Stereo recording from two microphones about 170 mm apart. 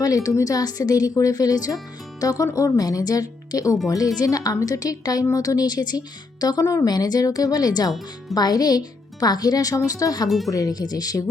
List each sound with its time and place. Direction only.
0.0 s speech: 20° left (ahead or behind)
10.2 s speech: centre (ahead or behind)
10.5 s speech: 20° left (ahead or behind)